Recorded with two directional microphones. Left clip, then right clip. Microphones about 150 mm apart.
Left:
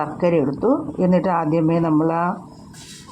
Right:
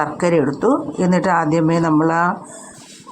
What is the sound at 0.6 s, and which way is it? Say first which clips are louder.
Speech: right 2 dB; 50° right (ahead or behind).